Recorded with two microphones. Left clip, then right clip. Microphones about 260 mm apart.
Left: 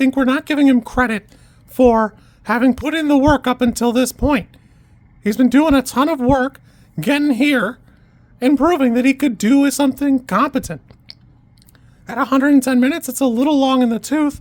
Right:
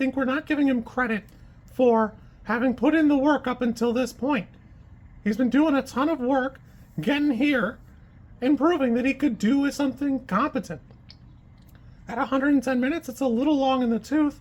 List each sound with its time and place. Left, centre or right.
0.0 s speech: left